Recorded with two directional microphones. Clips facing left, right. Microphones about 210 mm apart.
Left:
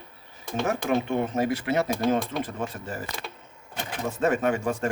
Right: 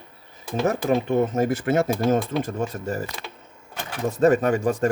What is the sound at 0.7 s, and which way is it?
Speech, 40° right (ahead or behind).